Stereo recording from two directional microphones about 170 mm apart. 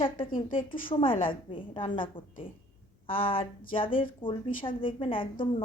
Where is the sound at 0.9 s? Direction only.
30° left (ahead or behind).